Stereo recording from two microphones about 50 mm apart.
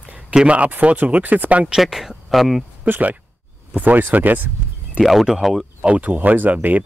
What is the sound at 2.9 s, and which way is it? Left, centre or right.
Speech, right.